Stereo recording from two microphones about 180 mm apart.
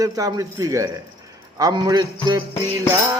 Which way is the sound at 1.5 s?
20° right (ahead or behind).